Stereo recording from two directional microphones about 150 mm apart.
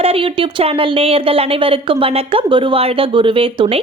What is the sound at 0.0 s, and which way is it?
Speech, 40° right (ahead or behind).